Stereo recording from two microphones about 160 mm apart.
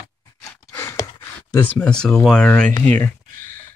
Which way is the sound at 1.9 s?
5° left (ahead or behind).